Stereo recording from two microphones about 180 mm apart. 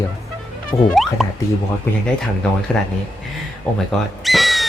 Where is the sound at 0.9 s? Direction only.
Centre (ahead or behind).